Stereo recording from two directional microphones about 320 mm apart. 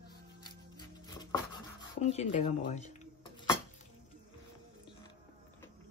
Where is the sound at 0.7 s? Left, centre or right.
Centre.